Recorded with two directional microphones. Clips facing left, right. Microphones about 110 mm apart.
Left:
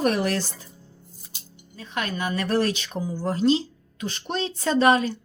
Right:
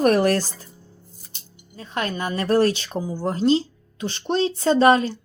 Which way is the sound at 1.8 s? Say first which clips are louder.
Right 2 dB; 35° right (ahead or behind).